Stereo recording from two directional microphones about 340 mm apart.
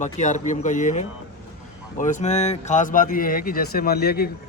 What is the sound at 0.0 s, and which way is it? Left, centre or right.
Speech, left.